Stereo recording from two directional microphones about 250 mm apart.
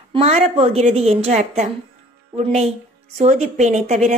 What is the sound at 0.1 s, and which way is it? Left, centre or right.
A woman's voice, right.